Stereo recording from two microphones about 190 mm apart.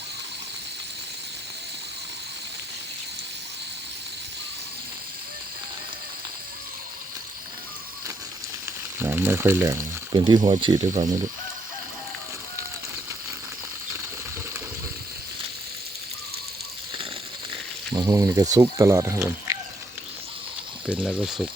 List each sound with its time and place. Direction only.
8.6 s frying: 10° right (ahead or behind)
10.1 s speech: 25° right (ahead or behind)
17.9 s speech: 20° right (ahead or behind)
21.1 s speech: 5° right (ahead or behind)